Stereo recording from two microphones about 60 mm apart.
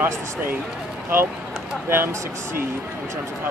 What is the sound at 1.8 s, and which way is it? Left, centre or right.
Speech, right.